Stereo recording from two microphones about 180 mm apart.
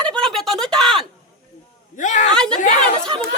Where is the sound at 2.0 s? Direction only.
45° left (ahead or behind).